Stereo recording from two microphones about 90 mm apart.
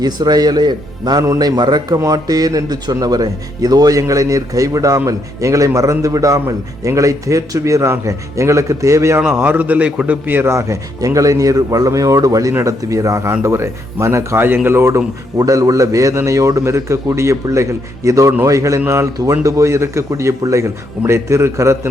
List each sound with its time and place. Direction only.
0.0 s a man's voice: 50° right (ahead or behind); by 21.8 s 35° right (ahead or behind)